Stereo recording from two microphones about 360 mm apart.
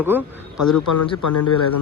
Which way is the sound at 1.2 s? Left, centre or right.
Left.